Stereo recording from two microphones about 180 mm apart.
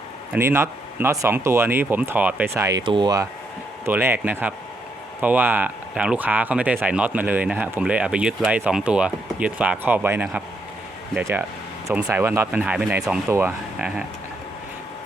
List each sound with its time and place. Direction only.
0.3 s speech: 15° right (ahead or behind)
2.8 s speech: 25° right (ahead or behind)
3.8 s speech: 10° right (ahead or behind)